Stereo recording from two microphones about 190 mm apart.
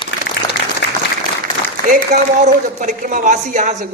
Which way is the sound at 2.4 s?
40° right (ahead or behind).